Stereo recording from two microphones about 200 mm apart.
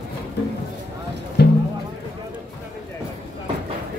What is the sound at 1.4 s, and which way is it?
Music, 55° left (ahead or behind).